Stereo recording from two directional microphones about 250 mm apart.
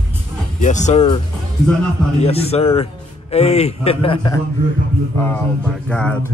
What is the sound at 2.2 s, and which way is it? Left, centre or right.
A man's voice, left.